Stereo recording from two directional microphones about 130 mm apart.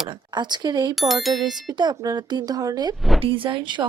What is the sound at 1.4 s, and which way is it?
Speech, 30° right (ahead or behind).